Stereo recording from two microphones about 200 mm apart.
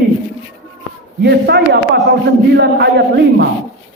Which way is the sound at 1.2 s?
55° right (ahead or behind).